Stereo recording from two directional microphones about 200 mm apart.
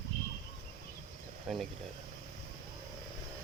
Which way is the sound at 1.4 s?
Centre (ahead or behind).